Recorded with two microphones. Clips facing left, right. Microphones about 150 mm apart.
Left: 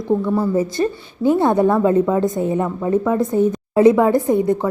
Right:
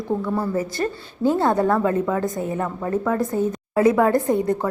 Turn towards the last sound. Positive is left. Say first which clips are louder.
# left 3 dB
turn(degrees=15)  # may be behind; listen again after turning